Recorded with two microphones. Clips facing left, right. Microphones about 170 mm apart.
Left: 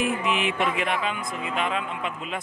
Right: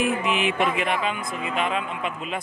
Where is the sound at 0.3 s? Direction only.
10° right (ahead or behind).